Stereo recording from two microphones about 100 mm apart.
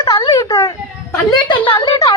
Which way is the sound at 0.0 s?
40° left (ahead or behind).